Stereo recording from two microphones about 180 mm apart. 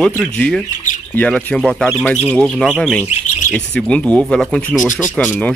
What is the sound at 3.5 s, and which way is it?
Speech, 5° left (ahead or behind).